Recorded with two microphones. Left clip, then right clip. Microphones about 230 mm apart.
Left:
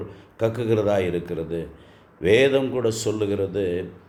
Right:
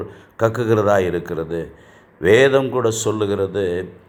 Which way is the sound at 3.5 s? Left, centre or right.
Centre.